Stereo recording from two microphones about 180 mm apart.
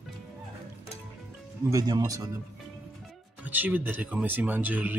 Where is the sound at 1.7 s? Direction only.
20° right (ahead or behind).